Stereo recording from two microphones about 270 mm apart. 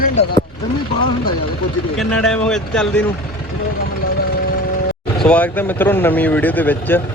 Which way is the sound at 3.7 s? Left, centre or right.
Left.